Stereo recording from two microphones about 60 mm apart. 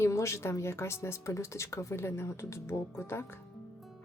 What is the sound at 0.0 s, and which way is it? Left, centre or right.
Speech, left.